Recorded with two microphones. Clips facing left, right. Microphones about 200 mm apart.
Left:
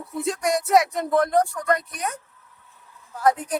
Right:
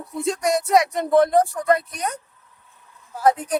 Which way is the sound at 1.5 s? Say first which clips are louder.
Right 4 dB; 25° right (ahead or behind).